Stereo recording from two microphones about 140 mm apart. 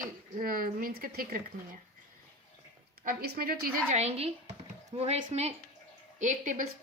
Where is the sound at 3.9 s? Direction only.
50° right (ahead or behind).